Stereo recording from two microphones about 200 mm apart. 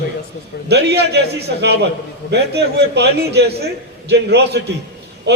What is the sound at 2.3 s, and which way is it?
A man's voice, 55° right (ahead or behind).